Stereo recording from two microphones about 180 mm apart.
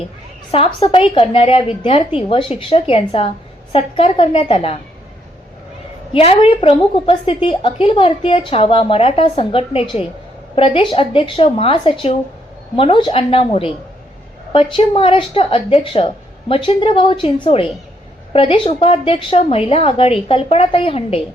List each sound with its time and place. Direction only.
0.5 s a woman's voice: 30° left (ahead or behind)
6.1 s a woman's voice: 30° left (ahead or behind)